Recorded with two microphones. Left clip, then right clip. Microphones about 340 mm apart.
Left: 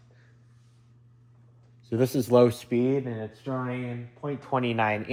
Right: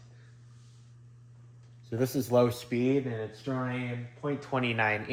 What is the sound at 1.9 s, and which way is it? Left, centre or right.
Speech, left.